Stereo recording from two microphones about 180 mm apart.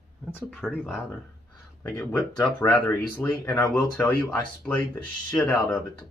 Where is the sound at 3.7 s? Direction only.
10° left (ahead or behind).